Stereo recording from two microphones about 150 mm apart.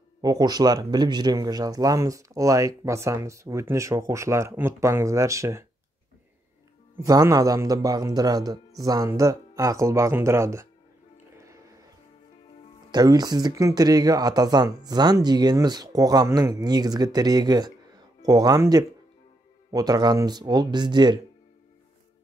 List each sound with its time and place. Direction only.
0.2 s speech: 25° right (ahead or behind)
7.1 s speech: 25° right (ahead or behind)
11.3 s music: 20° right (ahead or behind)
12.9 s speech: 25° right (ahead or behind)